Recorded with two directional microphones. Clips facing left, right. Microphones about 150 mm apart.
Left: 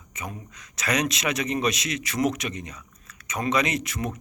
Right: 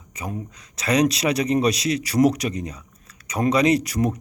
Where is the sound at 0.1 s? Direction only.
35° right (ahead or behind).